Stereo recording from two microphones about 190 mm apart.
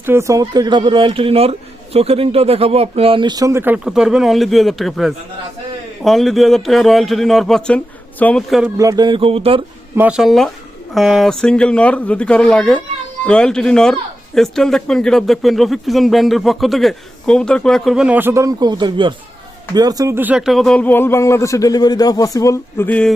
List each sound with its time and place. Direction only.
0.0 s a man's voice: 15° right (ahead or behind)
8.8 s a man's voice: 20° right (ahead or behind)
9.9 s speech: 10° right (ahead or behind)